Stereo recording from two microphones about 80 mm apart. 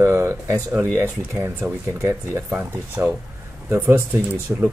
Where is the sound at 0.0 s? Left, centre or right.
Right.